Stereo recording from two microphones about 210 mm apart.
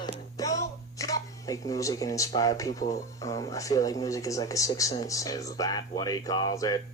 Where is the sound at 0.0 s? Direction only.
15° left (ahead or behind).